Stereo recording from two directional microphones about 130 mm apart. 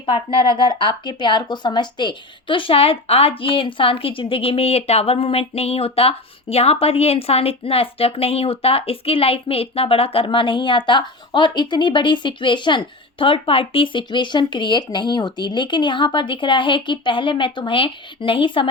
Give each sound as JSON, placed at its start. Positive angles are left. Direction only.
{"t": 0.0, "sound": "speech", "side_deg": 40}